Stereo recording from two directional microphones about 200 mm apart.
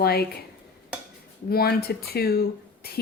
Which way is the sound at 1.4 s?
50° left (ahead or behind).